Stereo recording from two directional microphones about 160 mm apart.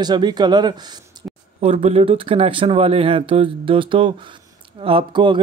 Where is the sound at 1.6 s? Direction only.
40° right (ahead or behind).